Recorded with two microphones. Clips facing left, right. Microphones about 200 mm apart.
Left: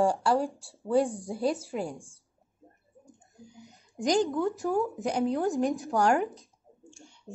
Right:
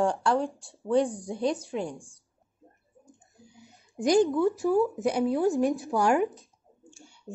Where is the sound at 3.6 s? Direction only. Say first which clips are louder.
Right 2 dB; 15° left (ahead or behind).